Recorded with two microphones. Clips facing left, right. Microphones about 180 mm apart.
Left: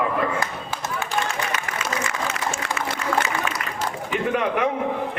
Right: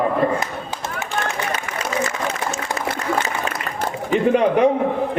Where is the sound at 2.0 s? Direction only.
35° right (ahead or behind).